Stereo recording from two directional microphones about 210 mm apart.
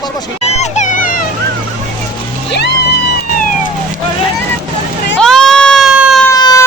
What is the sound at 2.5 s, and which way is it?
Music, 55° left (ahead or behind).